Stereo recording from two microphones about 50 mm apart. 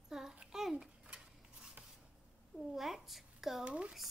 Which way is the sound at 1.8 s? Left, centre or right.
Right.